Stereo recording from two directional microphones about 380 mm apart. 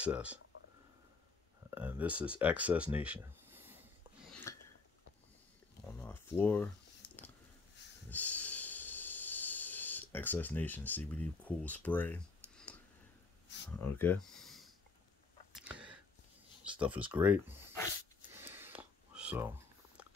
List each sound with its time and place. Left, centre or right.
0.0 s speech: centre
1.7 s a sound: centre
5.9 s speech: centre
8.1 s snort: centre
13.7 s speech: centre
15.5 s a sound: centre
16.6 s speech: centre
18.3 s whispering: centre